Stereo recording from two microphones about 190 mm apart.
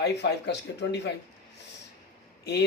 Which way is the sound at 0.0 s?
60° left (ahead or behind).